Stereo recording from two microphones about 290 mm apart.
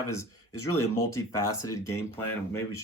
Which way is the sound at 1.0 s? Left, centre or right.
Centre.